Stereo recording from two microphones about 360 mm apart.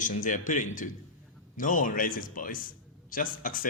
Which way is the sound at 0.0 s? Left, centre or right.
Left.